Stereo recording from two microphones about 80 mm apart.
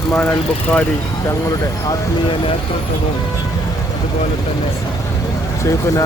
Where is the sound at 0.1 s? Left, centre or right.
Left.